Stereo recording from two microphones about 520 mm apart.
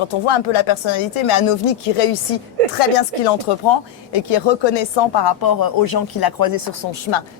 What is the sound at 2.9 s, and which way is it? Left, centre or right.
Speech, left.